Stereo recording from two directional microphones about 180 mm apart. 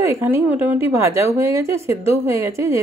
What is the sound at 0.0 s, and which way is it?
A woman's voice, 10° right (ahead or behind).